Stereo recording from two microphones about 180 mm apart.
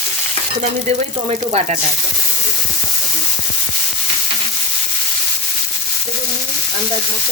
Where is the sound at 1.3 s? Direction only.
35° right (ahead or behind).